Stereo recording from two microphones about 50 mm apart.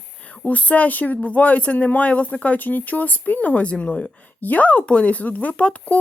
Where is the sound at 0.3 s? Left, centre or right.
Left.